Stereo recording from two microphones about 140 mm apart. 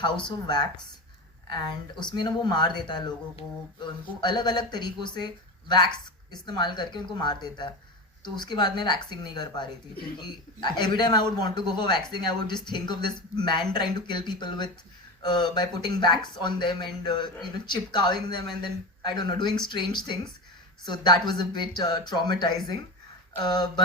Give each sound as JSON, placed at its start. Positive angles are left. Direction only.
{"t": 0.0, "sound": "speech", "side_deg": 30}